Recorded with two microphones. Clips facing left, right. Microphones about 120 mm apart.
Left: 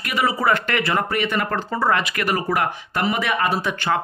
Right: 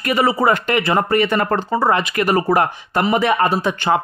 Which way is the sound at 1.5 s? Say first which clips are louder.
Right 2 dB; 20° right (ahead or behind).